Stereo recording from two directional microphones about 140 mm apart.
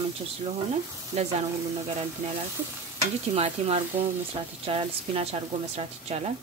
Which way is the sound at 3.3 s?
45° right (ahead or behind).